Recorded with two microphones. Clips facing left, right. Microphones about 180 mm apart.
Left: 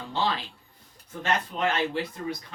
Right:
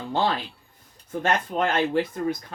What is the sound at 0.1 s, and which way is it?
Speech, 50° right (ahead or behind).